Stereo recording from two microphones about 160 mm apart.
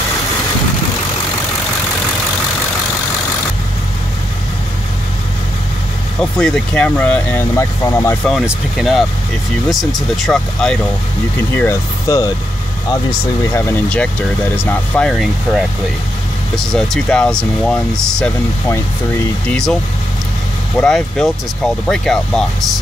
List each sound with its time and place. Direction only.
6.3 s speech: 5° left (ahead or behind)
8.3 s speech: centre (ahead or behind)
11.5 s speech: 15° left (ahead or behind)
13.5 s speech: 15° left (ahead or behind)
15.0 s speech: centre (ahead or behind)
19.4 s speech: 5° left (ahead or behind)